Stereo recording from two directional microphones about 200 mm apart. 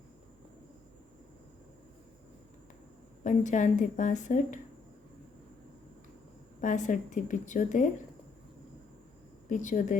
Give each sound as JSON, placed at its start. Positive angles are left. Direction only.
{"t": 3.2, "sound": "a woman's voice", "side_deg": 40}
{"t": 6.6, "sound": "a woman's voice", "side_deg": 40}
{"t": 9.5, "sound": "a woman's voice", "side_deg": 40}